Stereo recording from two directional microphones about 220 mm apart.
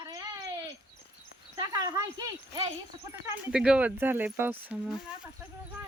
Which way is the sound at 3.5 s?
5° right (ahead or behind).